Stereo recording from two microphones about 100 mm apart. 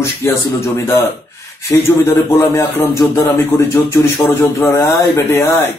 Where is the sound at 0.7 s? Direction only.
30° left (ahead or behind).